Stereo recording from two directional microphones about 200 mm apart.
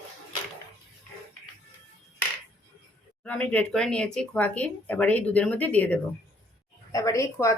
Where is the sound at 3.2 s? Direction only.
5° left (ahead or behind).